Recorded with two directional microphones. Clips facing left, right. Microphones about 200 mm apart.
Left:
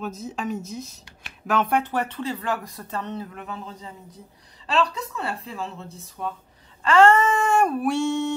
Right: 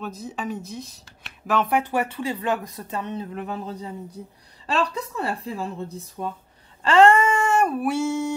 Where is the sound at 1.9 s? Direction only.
10° right (ahead or behind).